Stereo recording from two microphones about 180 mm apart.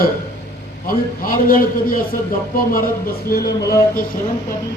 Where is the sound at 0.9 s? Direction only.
50° left (ahead or behind).